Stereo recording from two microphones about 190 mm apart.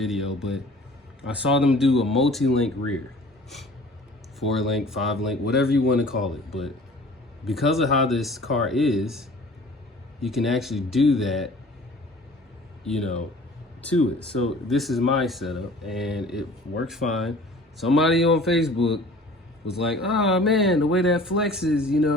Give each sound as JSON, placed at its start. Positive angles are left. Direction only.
{"t": 0.0, "sound": "speech", "side_deg": 0}
{"t": 4.4, "sound": "speech", "side_deg": 0}
{"t": 5.6, "sound": "speech", "side_deg": 55}
{"t": 5.9, "sound": "speech", "side_deg": 0}
{"t": 13.8, "sound": "speech", "side_deg": 5}